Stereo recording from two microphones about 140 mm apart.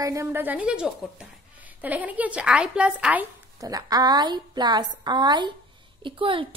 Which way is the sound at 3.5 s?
25° right (ahead or behind).